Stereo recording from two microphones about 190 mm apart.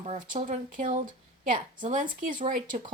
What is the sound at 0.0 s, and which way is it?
Speech, 35° right (ahead or behind).